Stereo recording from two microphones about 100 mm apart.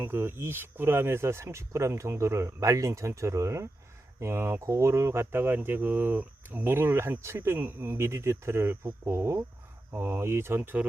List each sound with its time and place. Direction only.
0.0 s speech: 25° right (ahead or behind)